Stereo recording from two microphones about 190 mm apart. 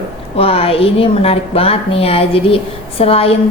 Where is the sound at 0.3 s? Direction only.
30° left (ahead or behind).